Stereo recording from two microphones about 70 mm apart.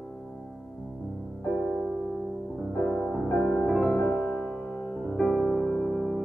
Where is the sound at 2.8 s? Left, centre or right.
Centre.